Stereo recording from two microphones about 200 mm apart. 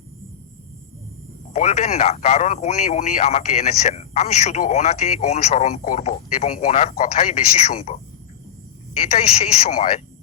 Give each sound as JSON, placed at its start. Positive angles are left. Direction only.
{"t": 1.5, "sound": "speech", "side_deg": 35}
{"t": 9.1, "sound": "speech", "side_deg": 30}